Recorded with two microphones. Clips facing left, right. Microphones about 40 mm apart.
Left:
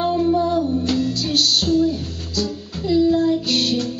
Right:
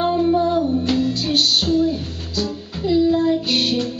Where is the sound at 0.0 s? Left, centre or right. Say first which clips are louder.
Right 1 dB; centre.